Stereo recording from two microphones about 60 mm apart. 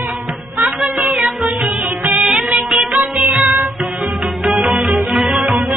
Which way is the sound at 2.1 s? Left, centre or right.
Centre.